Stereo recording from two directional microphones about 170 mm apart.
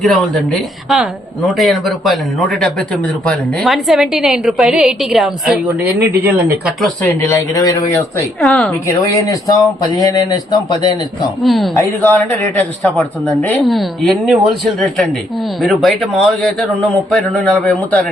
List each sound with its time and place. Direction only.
0.0 s speech: 5° left (ahead or behind)
6.8 s speech: 15° left (ahead or behind)
8.4 s speech: 5° left (ahead or behind)
8.9 s speech: 20° left (ahead or behind)
11.4 s speech: centre (ahead or behind)
11.7 s speech: 15° left (ahead or behind)